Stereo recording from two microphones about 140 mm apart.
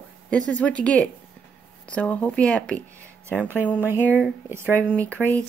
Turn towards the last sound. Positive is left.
turn(degrees=10)  # may be behind; listen again after turning